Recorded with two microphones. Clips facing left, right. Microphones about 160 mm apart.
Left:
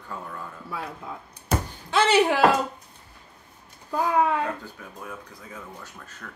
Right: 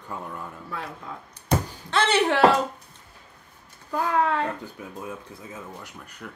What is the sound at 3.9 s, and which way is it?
Speech, 15° left (ahead or behind).